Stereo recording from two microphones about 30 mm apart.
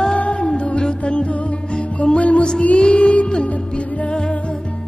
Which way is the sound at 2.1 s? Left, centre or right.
Left.